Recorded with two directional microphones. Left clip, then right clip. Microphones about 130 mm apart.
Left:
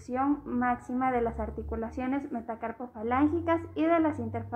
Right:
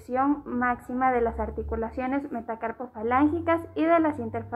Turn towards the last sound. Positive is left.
turn(degrees=-25)  # may be behind; listen again after turning